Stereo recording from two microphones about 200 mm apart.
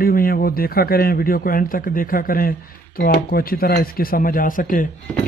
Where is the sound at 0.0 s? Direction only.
45° left (ahead or behind).